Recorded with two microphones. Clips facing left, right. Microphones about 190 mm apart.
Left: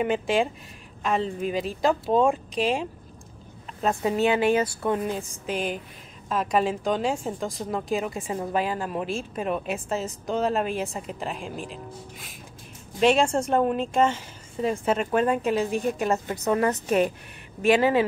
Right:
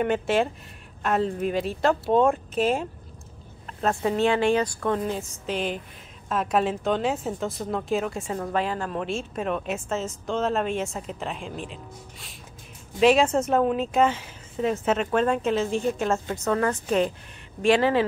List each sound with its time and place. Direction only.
0.0 s a woman's voice: centre (ahead or behind)
8.3 s a woman's voice: 10° left (ahead or behind)
16.1 s speech: 15° left (ahead or behind)
17.7 s speech: 10° left (ahead or behind)